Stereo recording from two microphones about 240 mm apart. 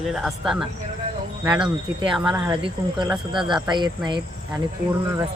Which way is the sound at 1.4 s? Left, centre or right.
Centre.